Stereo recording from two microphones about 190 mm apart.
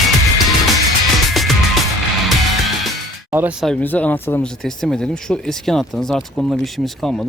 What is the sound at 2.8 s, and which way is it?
Music, 10° right (ahead or behind).